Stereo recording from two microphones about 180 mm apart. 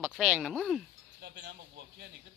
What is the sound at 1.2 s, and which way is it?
Speech, 65° right (ahead or behind).